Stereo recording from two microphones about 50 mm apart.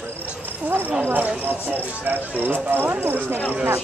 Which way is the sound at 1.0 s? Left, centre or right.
Right.